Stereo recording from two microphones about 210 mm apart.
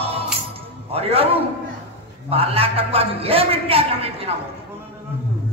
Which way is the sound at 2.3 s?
30° right (ahead or behind).